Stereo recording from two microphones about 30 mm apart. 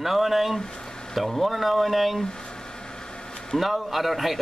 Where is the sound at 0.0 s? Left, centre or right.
Centre.